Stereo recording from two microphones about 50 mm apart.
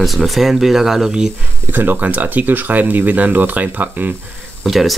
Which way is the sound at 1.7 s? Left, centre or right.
Right.